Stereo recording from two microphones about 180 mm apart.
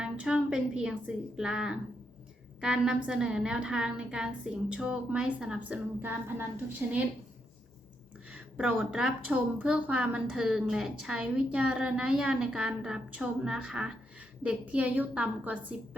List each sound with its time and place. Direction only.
0.0 s a woman's voice: 5° right (ahead or behind)
8.3 s a woman's voice: 5° right (ahead or behind)